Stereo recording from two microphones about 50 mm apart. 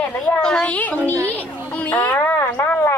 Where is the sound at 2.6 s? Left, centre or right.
Left.